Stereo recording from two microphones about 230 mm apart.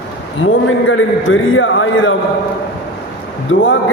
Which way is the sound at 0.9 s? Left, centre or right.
Left.